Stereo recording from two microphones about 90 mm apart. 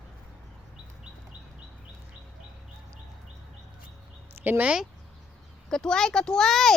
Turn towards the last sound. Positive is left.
turn(degrees=5)  # may be behind; listen again after turning